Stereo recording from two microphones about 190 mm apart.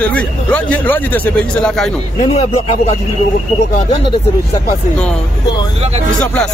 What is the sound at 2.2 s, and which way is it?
Speech, 35° left (ahead or behind).